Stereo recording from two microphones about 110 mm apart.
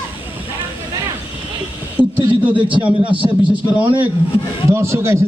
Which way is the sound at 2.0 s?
15° right (ahead or behind).